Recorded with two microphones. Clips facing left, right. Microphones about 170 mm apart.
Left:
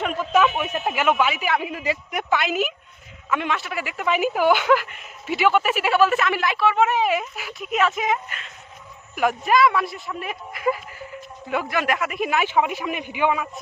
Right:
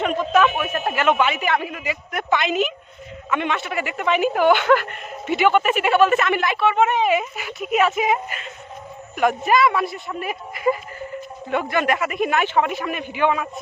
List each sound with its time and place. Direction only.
0.0 s a sound: 5° left (ahead or behind)
1.7 s speech: 30° left (ahead or behind)
2.1 s speech: 5° left (ahead or behind)